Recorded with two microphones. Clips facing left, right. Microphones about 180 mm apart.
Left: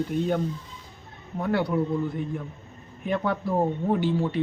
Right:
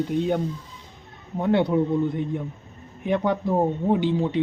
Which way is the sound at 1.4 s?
20° right (ahead or behind).